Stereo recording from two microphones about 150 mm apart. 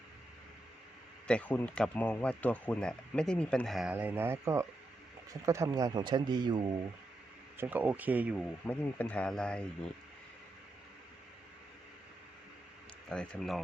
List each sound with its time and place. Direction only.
1.3 s speech: 10° left (ahead or behind)
3.9 s speech: 15° right (ahead or behind)
7.5 s speech: 15° right (ahead or behind)
8.6 s speech: 10° left (ahead or behind)
13.1 s speech: 5° left (ahead or behind)